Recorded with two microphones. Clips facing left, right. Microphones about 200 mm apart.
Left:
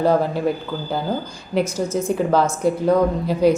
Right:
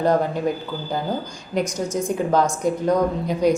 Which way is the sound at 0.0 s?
5° left (ahead or behind).